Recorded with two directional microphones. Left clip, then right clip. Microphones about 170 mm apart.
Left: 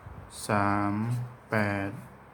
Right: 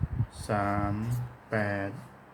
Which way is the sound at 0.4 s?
25° left (ahead or behind).